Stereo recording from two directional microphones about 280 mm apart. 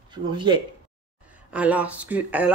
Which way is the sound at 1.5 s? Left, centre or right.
Centre.